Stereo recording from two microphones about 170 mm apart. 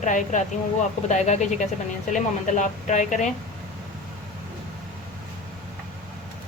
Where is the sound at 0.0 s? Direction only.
45° left (ahead or behind).